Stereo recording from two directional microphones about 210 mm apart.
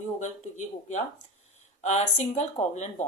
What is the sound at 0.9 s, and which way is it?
A woman's voice, 35° left (ahead or behind).